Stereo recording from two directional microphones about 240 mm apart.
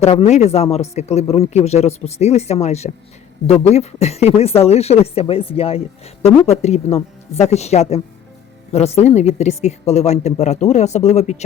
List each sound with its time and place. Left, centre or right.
0.0 s speech: left